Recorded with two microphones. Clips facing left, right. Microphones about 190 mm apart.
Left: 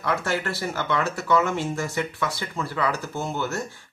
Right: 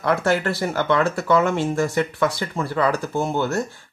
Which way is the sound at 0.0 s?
55° right (ahead or behind).